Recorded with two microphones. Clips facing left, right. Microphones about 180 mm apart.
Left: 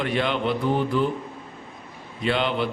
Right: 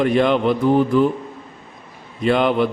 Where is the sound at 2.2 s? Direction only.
50° right (ahead or behind).